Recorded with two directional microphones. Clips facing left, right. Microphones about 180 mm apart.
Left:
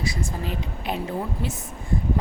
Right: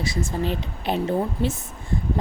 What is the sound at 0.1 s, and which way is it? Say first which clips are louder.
Speech: right 5 dB; 25° right (ahead or behind).